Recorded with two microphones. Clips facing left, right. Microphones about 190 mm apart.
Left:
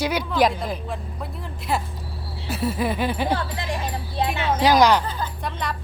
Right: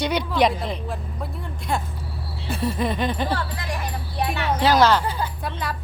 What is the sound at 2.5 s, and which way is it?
Music, 5° left (ahead or behind).